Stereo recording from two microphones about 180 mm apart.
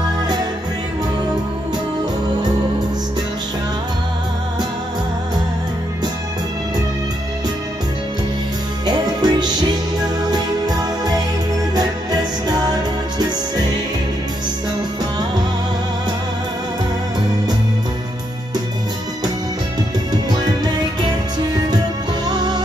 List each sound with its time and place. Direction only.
8.8 s music: 20° right (ahead or behind)